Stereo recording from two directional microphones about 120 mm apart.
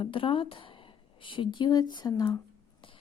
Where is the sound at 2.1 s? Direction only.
25° left (ahead or behind).